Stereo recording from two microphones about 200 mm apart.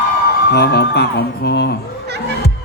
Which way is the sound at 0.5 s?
55° left (ahead or behind).